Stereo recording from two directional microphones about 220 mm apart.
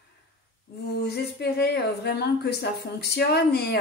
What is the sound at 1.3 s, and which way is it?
A woman's voice, 45° left (ahead or behind).